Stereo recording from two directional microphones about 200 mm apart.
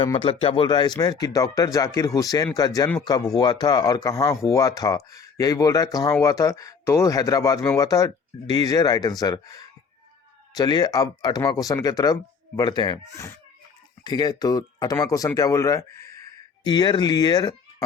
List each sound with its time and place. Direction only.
0.0 s speech: 25° left (ahead or behind)